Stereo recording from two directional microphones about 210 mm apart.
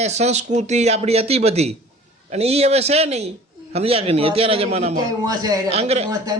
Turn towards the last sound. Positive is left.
turn(degrees=-15)  # may be behind; listen again after turning